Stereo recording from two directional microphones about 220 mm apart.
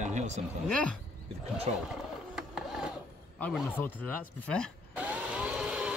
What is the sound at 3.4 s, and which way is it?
Speech, 5° left (ahead or behind).